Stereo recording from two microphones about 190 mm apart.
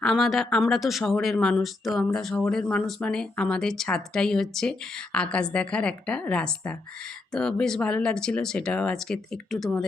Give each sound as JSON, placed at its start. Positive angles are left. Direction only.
{"t": 0.0, "sound": "speech", "side_deg": 0}